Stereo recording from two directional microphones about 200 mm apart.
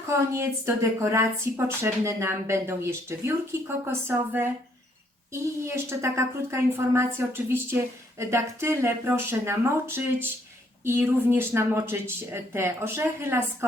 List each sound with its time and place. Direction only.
0.3 s speech: 15° right (ahead or behind)